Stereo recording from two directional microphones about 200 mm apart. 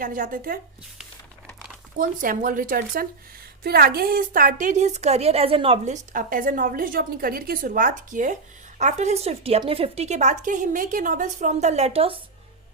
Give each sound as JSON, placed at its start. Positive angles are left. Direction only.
{"t": 0.0, "sound": "a woman's voice", "side_deg": -45}
{"t": 2.0, "sound": "a woman's voice", "side_deg": -45}